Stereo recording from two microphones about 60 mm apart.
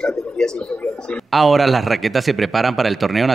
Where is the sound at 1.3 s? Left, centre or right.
Centre.